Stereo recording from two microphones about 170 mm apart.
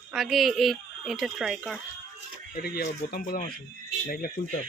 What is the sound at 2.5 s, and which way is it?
Speech, 60° left (ahead or behind).